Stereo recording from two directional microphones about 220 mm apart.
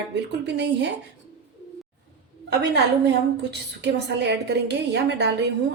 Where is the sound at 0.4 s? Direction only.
50° right (ahead or behind).